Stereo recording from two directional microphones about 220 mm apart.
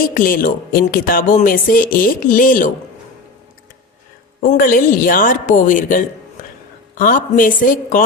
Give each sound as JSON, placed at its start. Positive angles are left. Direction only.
{"t": 0.0, "sound": "speech", "side_deg": 40}
{"t": 4.4, "sound": "speech", "side_deg": 40}